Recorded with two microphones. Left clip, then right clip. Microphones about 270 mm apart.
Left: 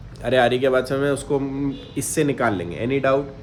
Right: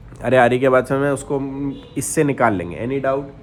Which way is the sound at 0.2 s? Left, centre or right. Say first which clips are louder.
Right 4 dB; centre.